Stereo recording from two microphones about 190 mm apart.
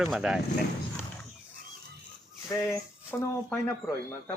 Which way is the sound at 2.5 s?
15° left (ahead or behind).